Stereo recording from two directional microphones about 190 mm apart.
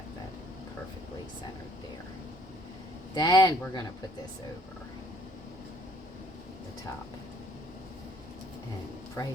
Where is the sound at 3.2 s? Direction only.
20° left (ahead or behind).